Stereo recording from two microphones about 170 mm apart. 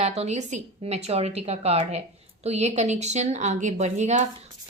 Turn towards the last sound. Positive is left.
turn(degrees=-45)  # may be behind; listen again after turning